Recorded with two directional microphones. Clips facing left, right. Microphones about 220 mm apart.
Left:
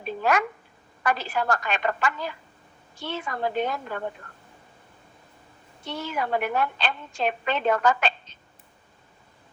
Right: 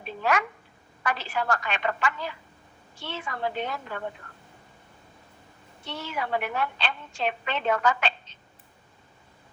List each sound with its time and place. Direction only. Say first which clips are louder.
0.0 s a sound: left 3 dB; 45° left (ahead or behind)
1.0 s a woman's voice: left 3 dB; 45° left (ahead or behind)
5.8 s a woman's voice: left 3 dB; 45° left (ahead or behind)